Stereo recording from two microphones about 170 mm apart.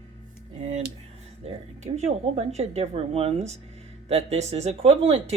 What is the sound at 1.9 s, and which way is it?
Speech, 40° right (ahead or behind).